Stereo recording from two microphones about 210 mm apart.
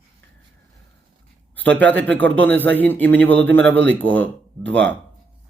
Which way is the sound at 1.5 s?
5° left (ahead or behind).